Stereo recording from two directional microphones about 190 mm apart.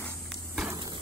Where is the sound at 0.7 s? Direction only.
25° right (ahead or behind).